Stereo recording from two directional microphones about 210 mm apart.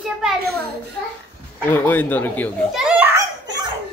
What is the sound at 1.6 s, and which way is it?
A child's voice, 10° left (ahead or behind).